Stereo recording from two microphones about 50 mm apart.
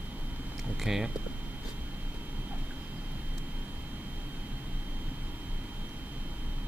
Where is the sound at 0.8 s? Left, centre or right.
Centre.